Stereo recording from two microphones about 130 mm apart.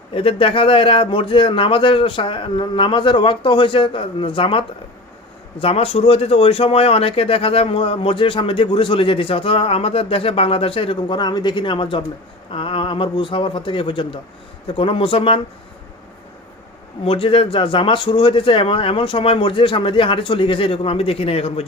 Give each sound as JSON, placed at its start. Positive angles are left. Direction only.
{"t": 0.1, "sound": "speech", "side_deg": 45}
{"t": 17.0, "sound": "speech", "side_deg": 45}